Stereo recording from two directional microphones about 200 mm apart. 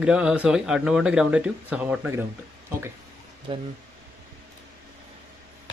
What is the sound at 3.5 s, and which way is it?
Speech, 25° right (ahead or behind).